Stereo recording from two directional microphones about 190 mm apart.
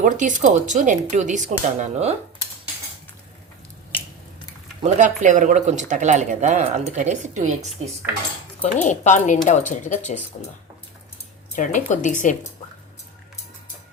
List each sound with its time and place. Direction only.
0.0 s speech: 40° right (ahead or behind)
4.8 s speech: 40° right (ahead or behind)
8.6 s speech: 40° left (ahead or behind)
11.5 s speech: 40° left (ahead or behind)